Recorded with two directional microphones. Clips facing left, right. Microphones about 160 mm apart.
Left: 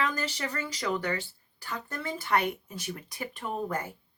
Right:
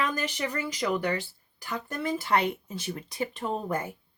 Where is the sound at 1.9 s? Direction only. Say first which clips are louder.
Right 2 dB; 15° right (ahead or behind).